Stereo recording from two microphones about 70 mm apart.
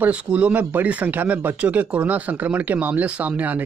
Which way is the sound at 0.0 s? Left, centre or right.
Centre.